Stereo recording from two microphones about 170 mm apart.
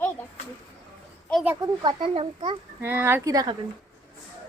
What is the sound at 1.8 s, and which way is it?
Speech, 30° right (ahead or behind).